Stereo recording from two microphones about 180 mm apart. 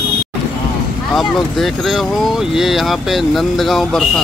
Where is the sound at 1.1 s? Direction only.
Centre (ahead or behind).